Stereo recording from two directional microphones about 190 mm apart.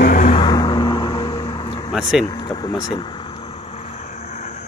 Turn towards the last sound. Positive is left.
turn(degrees=40)  # may be behind; listen again after turning